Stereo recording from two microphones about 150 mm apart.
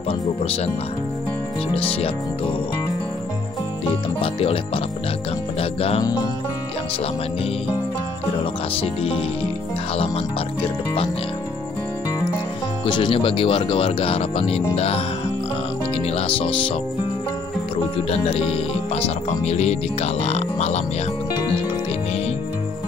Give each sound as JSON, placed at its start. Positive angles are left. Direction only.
{"t": 1.7, "sound": "speech", "side_deg": 40}
{"t": 4.2, "sound": "speech", "side_deg": 40}
{"t": 5.6, "sound": "music", "side_deg": 40}
{"t": 8.8, "sound": "speech", "side_deg": 40}
{"t": 12.8, "sound": "speech", "side_deg": 35}
{"t": 16.2, "sound": "speech", "side_deg": 40}
{"t": 18.1, "sound": "speech", "side_deg": 40}